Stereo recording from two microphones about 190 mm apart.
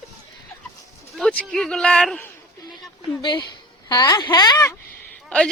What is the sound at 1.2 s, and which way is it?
A man's voice, 5° left (ahead or behind).